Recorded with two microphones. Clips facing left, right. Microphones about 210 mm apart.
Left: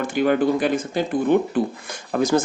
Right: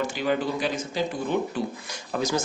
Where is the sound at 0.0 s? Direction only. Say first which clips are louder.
Left 7 dB; 55° left (ahead or behind).